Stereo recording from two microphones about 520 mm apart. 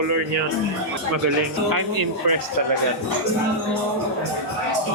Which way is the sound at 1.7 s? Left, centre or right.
Right.